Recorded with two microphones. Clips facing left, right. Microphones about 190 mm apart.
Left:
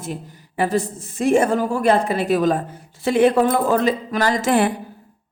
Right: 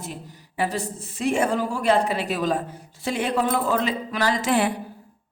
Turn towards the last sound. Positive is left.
turn(degrees=50)  # may be behind; listen again after turning